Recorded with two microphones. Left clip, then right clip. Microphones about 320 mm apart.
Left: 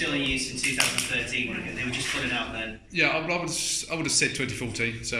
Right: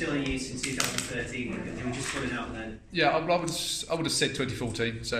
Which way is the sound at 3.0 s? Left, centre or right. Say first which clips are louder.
Even; right.